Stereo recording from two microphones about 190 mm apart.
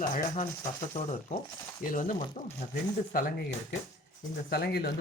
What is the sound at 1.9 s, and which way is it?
Speech, 45° left (ahead or behind).